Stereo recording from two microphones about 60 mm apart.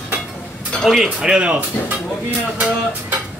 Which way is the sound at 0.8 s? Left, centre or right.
Centre.